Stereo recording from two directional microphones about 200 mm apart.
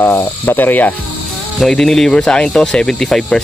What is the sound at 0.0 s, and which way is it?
Speech, 10° left (ahead or behind).